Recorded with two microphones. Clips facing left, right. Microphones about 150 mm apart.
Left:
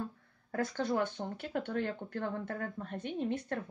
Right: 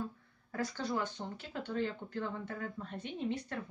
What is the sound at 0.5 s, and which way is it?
A woman's voice, 55° left (ahead or behind).